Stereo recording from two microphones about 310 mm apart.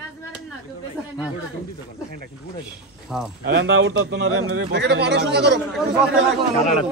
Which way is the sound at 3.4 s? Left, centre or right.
Right.